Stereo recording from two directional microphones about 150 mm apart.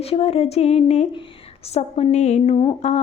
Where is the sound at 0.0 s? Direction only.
40° left (ahead or behind).